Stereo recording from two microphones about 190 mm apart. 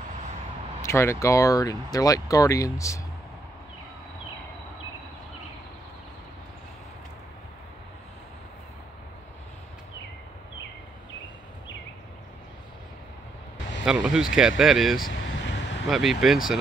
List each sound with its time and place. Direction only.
0.8 s speech: 15° left (ahead or behind)
13.8 s speech: 5° right (ahead or behind)
15.4 s a sound: 65° left (ahead or behind)
15.9 s speech: centre (ahead or behind)